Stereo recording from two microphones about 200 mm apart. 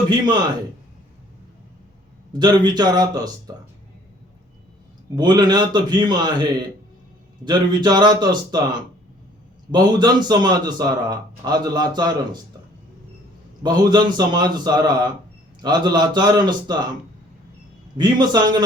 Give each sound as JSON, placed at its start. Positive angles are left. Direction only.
{"t": 0.1, "sound": "speech", "side_deg": -20}
{"t": 2.4, "sound": "speech", "side_deg": -20}
{"t": 5.1, "sound": "speech", "side_deg": -20}
{"t": 7.4, "sound": "speech", "side_deg": -20}
{"t": 9.7, "sound": "speech", "side_deg": -20}
{"t": 13.6, "sound": "speech", "side_deg": -20}
{"t": 17.9, "sound": "speech", "side_deg": -20}